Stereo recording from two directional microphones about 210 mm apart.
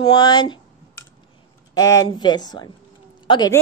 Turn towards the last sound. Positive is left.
turn(degrees=20)  # may be behind; listen again after turning